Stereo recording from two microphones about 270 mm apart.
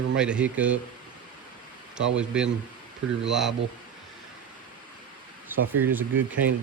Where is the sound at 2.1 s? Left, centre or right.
Centre.